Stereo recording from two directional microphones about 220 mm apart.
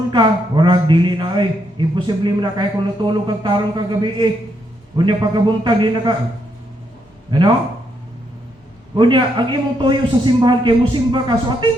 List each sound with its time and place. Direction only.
0.1 s a man's voice: 20° right (ahead or behind)
7.3 s speech: 20° right (ahead or behind)
9.0 s a man's voice: 20° right (ahead or behind)